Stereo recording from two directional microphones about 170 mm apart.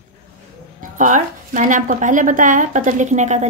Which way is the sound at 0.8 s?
50° right (ahead or behind).